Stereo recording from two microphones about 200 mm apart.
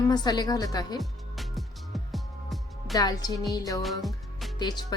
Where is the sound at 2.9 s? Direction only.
20° left (ahead or behind).